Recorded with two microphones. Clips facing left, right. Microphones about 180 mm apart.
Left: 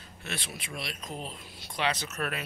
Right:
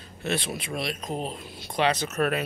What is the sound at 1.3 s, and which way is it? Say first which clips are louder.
Speech: right 7 dB; 55° right (ahead or behind).